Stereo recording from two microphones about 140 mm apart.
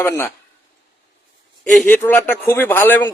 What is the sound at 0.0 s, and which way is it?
Speech, 15° left (ahead or behind).